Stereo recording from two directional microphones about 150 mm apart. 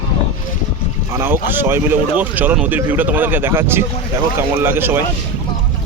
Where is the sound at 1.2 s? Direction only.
15° right (ahead or behind).